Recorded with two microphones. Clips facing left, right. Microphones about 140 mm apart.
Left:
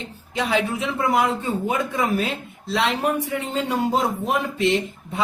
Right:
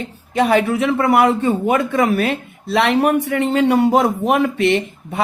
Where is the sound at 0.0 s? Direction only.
55° right (ahead or behind).